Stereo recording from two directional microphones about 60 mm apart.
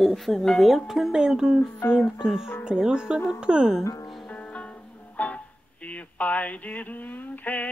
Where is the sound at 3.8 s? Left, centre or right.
Left.